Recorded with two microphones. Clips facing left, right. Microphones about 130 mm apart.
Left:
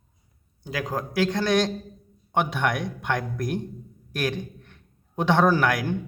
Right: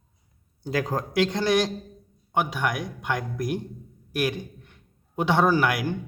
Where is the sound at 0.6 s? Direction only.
35° right (ahead or behind).